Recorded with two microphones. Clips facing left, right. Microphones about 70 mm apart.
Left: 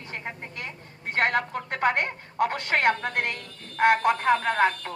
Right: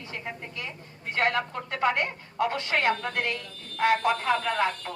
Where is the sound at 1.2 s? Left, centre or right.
Left.